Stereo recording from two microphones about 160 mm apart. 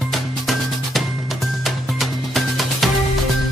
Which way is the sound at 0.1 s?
Centre (ahead or behind).